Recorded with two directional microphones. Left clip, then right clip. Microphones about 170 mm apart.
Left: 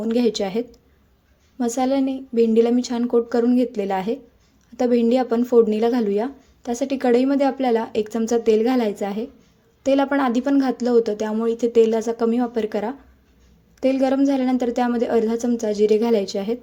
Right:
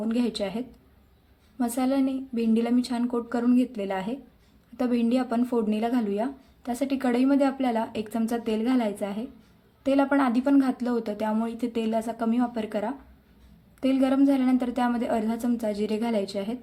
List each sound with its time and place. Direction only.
0.0 s speech: 30° left (ahead or behind)